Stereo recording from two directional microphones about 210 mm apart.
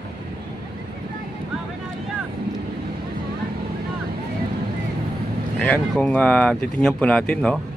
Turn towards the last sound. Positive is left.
turn(degrees=5)  # may be behind; listen again after turning